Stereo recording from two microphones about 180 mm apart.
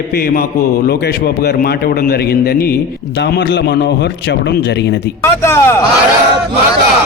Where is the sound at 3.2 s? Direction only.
70° left (ahead or behind).